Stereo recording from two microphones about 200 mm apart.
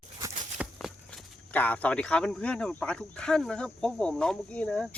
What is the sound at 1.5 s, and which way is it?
Speech, 10° left (ahead or behind).